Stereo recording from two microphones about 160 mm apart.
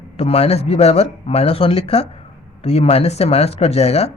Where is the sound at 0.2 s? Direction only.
40° left (ahead or behind).